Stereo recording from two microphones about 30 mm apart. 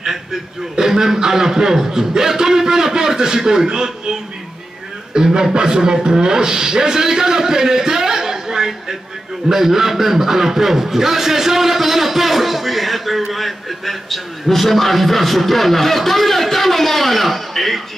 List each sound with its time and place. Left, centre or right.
0.7 s a man's voice: centre
5.1 s a man's voice: right; by 17.8 s centre